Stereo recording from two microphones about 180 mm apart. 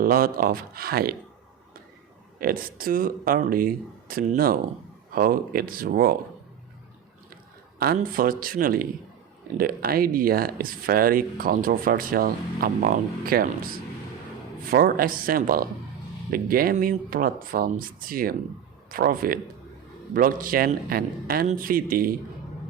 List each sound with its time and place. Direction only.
0.0 s speech: 55° right (ahead or behind)
2.4 s speech: 55° right (ahead or behind)
7.9 s speech: 50° right (ahead or behind)